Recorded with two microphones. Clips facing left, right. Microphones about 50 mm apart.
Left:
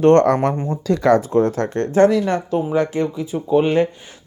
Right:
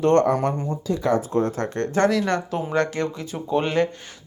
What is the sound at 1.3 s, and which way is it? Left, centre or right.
Speech, left.